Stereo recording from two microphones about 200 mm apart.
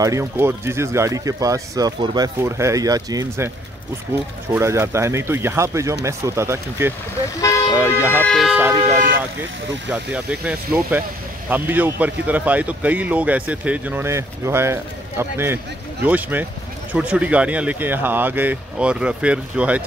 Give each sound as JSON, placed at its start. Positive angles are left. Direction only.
{"t": 0.0, "sound": "speech", "side_deg": -15}
{"t": 8.1, "sound": "a sound", "side_deg": 10}
{"t": 8.4, "sound": "speech", "side_deg": -5}